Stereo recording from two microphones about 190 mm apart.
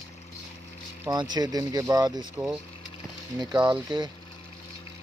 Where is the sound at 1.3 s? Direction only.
20° right (ahead or behind).